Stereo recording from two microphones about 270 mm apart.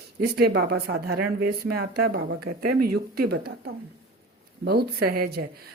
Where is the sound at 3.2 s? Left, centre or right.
Right.